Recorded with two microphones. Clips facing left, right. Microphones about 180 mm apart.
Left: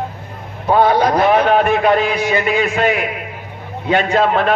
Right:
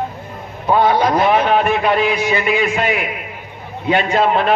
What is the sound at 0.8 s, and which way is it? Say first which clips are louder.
A man's voice: left 2 dB; 40° left (ahead or behind).